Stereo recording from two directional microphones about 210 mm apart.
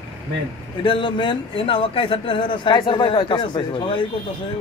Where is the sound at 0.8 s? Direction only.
25° left (ahead or behind).